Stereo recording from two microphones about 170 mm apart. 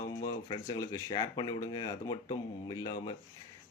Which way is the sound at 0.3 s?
25° left (ahead or behind).